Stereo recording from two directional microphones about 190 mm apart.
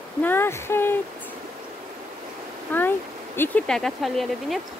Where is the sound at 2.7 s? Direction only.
10° left (ahead or behind).